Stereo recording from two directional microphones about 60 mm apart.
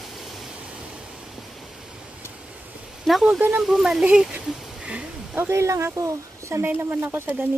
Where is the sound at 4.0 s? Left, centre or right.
Centre.